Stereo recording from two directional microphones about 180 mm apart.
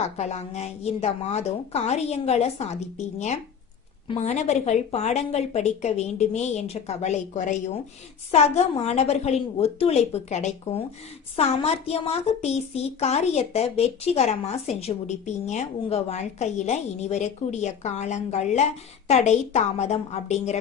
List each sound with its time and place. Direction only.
0.2 s a woman's voice: 40° left (ahead or behind)
4.1 s a woman's voice: 40° left (ahead or behind)